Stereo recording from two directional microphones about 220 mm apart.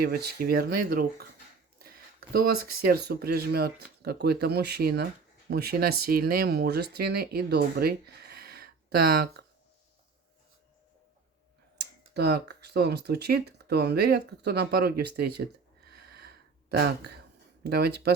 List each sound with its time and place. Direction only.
0.0 s speech: 45° right (ahead or behind)
2.3 s speech: 45° right (ahead or behind)
11.8 s speech: 45° right (ahead or behind)